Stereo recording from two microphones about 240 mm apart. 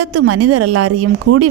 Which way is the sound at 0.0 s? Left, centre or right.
Right.